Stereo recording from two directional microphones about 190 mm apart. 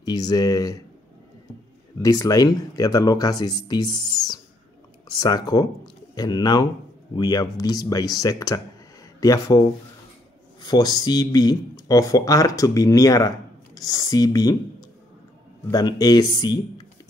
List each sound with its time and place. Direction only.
0.0 s speech: 20° left (ahead or behind)
2.0 s speech: 20° left (ahead or behind)